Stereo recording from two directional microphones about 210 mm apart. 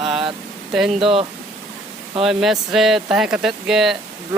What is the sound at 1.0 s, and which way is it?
Speech, 25° right (ahead or behind).